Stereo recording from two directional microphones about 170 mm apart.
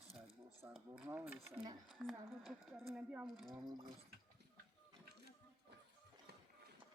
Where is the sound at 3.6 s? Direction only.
25° right (ahead or behind).